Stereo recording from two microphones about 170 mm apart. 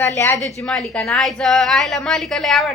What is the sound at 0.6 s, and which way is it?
Speech, centre (ahead or behind).